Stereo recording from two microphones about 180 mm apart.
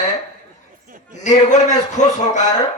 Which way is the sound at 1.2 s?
40° left (ahead or behind).